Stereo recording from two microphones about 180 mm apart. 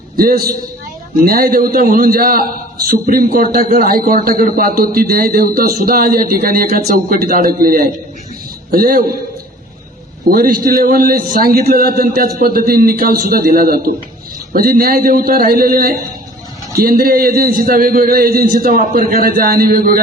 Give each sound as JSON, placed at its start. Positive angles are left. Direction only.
{"t": 0.2, "sound": "a man's voice", "side_deg": -55}
{"t": 10.2, "sound": "a man's voice", "side_deg": -50}